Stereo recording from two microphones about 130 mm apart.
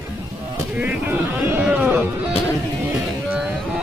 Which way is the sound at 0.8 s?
15° right (ahead or behind).